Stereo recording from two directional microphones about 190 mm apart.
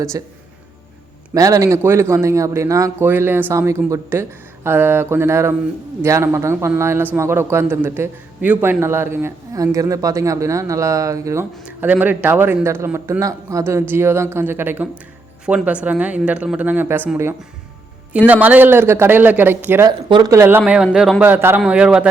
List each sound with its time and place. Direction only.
0.1 s a man's voice: 15° right (ahead or behind)
20.0 s a man's voice: 25° right (ahead or behind); by 22.1 s 5° right (ahead or behind)